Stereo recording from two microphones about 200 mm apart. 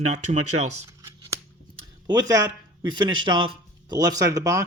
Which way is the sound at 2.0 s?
20° right (ahead or behind).